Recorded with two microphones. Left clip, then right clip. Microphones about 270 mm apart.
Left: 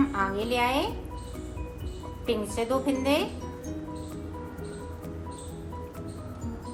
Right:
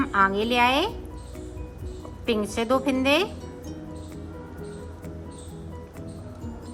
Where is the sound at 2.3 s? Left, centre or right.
Centre.